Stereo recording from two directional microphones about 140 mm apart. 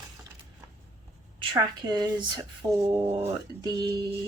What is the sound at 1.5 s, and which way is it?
Speech, 30° right (ahead or behind).